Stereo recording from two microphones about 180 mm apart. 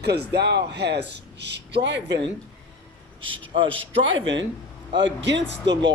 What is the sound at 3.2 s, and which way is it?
A man's voice, 30° right (ahead or behind).